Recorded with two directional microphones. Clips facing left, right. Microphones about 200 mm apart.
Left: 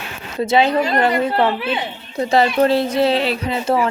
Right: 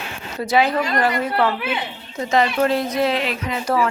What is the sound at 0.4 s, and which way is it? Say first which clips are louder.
A woman's voice: left 3 dB; 25° left (ahead or behind).